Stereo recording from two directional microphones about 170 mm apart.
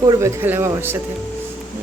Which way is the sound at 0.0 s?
20° right (ahead or behind).